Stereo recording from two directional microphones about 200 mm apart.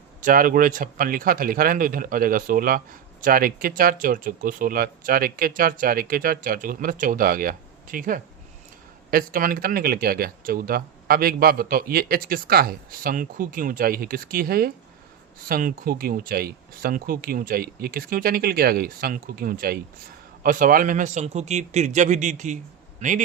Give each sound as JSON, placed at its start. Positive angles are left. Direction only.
{"t": 0.2, "sound": "a man's voice", "side_deg": -40}